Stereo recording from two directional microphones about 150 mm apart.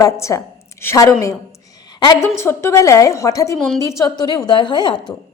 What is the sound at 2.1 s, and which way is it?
A woman's voice, 15° left (ahead or behind).